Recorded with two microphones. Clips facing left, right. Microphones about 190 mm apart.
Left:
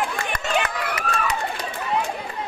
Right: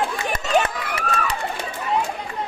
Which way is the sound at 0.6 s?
30° right (ahead or behind).